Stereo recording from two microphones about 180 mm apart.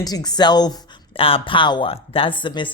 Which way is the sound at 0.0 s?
20° left (ahead or behind).